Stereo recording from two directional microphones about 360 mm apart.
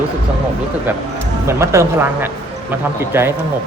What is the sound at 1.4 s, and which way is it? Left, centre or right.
Speech, centre.